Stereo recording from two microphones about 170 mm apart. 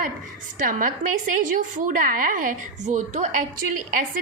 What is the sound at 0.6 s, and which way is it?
A woman's voice, 50° right (ahead or behind).